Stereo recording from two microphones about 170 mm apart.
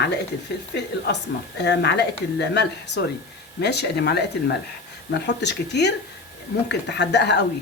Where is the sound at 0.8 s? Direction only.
85° left.